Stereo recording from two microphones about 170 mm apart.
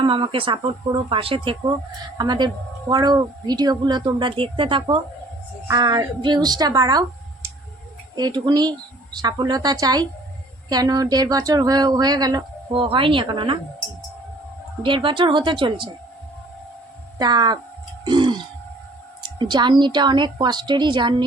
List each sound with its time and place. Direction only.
0.0 s speech: 30° right (ahead or behind)
8.1 s speech: 25° right (ahead or behind)
14.8 s speech: 30° right (ahead or behind)
17.2 s speech: 25° right (ahead or behind)
18.0 s a sound: 25° right (ahead or behind)
19.4 s speech: 25° right (ahead or behind)